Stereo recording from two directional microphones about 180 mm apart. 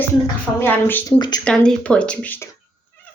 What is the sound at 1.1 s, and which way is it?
Speech, 25° left (ahead or behind).